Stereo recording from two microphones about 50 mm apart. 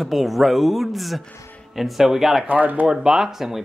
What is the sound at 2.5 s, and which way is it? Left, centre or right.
Speech, right.